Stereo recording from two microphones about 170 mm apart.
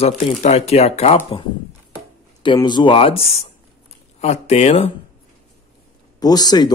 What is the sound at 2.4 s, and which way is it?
Speech, 25° left (ahead or behind).